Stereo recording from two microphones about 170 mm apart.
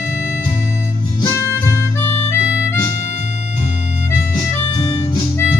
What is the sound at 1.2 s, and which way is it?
Harmonica, 15° left (ahead or behind).